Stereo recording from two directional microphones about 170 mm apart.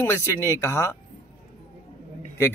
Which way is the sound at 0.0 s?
15° left (ahead or behind).